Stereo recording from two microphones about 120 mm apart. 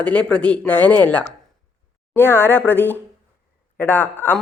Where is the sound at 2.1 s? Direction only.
20° left (ahead or behind).